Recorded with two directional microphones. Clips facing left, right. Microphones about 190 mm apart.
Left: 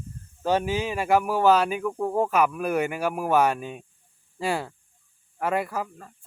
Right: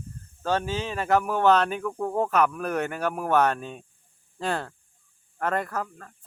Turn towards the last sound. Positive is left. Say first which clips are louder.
# left 1 dB
turn(degrees=10)  # may be behind; listen again after turning